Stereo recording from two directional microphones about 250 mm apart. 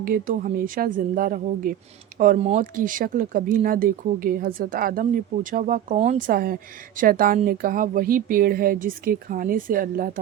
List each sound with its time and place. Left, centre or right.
0.0 s speech: right